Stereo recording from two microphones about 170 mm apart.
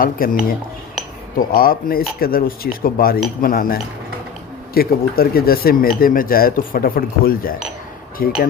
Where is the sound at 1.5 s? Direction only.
60° left (ahead or behind).